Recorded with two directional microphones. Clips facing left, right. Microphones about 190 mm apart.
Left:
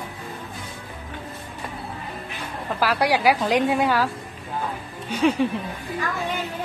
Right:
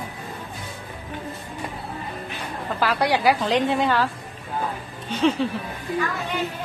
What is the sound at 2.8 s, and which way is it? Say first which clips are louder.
A woman's voice: even; 10° left (ahead or behind).